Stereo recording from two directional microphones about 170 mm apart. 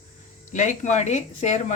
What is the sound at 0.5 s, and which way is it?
Speech, 45° left (ahead or behind).